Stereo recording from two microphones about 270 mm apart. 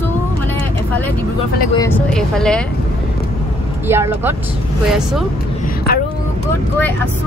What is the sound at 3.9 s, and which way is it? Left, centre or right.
Speech, centre.